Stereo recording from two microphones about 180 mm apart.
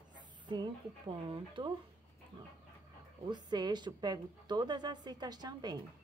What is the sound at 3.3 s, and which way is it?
A woman's voice, 25° right (ahead or behind).